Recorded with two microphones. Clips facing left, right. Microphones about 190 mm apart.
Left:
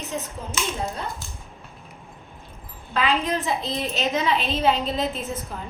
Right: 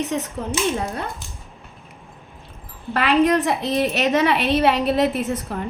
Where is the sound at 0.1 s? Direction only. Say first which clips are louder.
Right 6 dB; 70° right (ahead or behind).